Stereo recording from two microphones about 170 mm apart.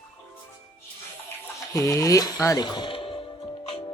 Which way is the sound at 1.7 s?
20° left (ahead or behind).